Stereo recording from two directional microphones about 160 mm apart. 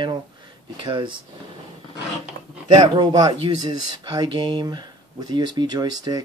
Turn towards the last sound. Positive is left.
turn(degrees=-25)  # may be behind; listen again after turning